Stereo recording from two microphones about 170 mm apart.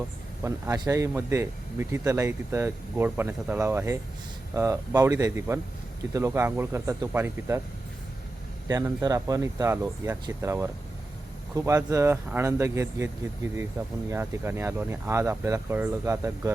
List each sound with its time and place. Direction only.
0.4 s speech: 15° right (ahead or behind)
8.6 s speech: 20° right (ahead or behind)